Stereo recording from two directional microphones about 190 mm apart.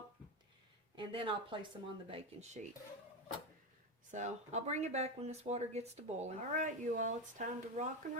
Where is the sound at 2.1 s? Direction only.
35° right (ahead or behind).